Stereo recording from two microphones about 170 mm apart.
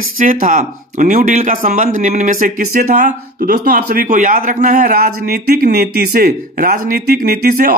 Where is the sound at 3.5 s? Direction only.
60° right (ahead or behind).